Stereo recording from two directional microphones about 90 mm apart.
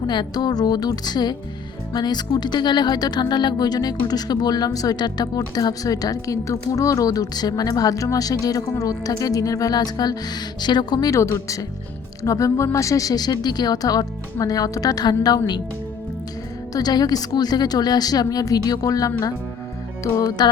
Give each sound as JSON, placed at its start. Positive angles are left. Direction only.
{"t": 0.1, "sound": "speech", "side_deg": 55}
{"t": 11.1, "sound": "speech", "side_deg": 30}
{"t": 16.7, "sound": "speech", "side_deg": 45}
{"t": 20.4, "sound": "speech", "side_deg": 50}